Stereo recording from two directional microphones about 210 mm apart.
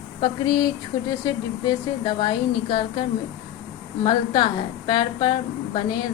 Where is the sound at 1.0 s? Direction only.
20° left (ahead or behind).